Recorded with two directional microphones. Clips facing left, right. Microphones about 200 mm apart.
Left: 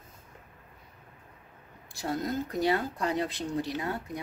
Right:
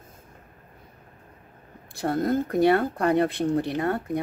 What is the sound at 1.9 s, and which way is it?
Speech, 55° right (ahead or behind).